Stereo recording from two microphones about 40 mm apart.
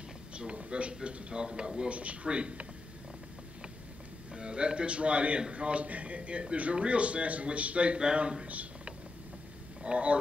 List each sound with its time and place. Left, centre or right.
0.3 s a sound: right
1.0 s a man's voice: right
4.3 s a man's voice: right
9.8 s speech: right